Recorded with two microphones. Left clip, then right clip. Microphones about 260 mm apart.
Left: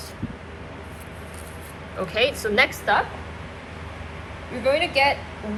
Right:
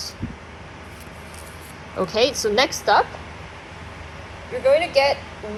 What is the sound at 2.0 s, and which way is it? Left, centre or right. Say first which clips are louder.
Speech: right 3 dB; centre.